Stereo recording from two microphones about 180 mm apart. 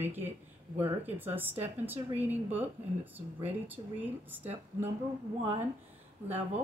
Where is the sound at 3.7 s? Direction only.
10° right (ahead or behind).